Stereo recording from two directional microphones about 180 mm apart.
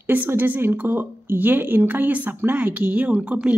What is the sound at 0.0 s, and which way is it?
A woman's voice, 10° right (ahead or behind).